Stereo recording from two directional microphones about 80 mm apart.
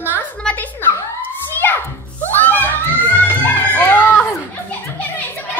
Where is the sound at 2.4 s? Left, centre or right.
Left.